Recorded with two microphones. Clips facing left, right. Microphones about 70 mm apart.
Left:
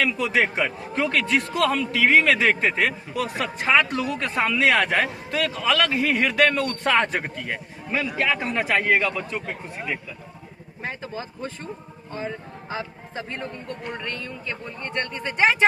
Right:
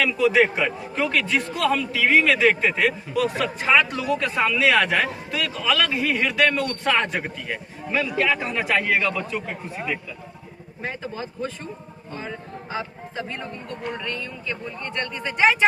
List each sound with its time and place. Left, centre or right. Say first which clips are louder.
0.0 s a man's voice: right 3 dB; left
1.5 s speech: left 1 dB; left
1.8 s a man's voice: left 2 dB; left
13.9 s a man's voice: right 1 dB; left